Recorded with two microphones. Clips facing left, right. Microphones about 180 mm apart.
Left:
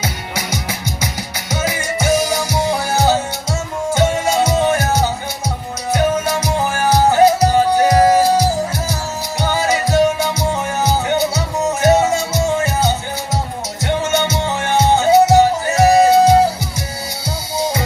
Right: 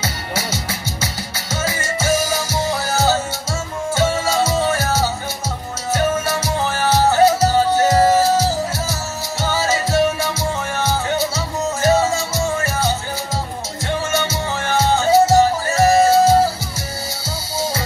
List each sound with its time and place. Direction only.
0.0 s music: 15° left (ahead or behind)